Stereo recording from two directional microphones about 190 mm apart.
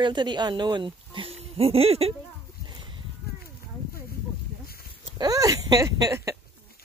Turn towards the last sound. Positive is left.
turn(degrees=-15)  # may be behind; listen again after turning